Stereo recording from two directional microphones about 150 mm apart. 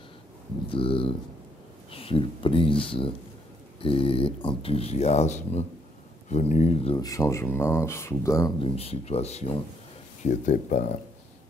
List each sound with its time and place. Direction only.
0.7 s speech: 35° left (ahead or behind)
7.0 s speech: 20° left (ahead or behind)
8.5 s speech: 40° left (ahead or behind)